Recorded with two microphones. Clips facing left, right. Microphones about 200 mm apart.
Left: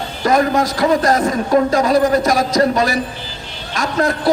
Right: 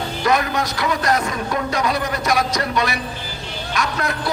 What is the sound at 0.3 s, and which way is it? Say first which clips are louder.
A man's voice: left 6 dB; 45° left (ahead or behind).